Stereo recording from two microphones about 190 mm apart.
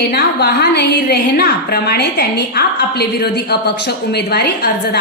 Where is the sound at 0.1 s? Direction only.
55° left (ahead or behind).